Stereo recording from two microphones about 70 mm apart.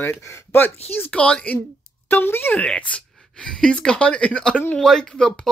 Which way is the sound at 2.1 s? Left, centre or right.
Left.